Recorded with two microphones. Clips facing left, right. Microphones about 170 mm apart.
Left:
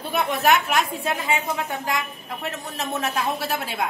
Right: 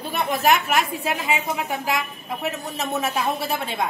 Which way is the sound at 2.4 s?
Centre (ahead or behind).